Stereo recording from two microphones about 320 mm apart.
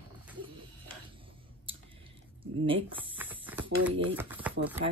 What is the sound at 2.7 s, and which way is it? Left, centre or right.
Speech, centre.